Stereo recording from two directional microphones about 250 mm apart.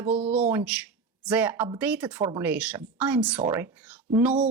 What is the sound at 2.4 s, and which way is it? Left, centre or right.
Speech, centre.